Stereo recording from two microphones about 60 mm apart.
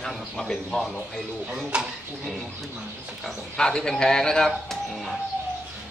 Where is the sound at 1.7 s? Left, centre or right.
Centre.